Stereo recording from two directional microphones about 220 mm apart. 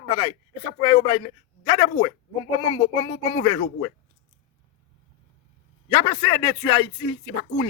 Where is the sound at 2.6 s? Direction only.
20° left (ahead or behind).